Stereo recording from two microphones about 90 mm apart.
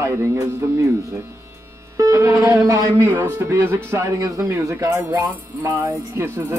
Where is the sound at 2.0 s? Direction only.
35° right (ahead or behind).